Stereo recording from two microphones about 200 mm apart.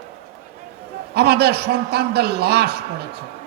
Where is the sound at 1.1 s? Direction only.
55° right (ahead or behind).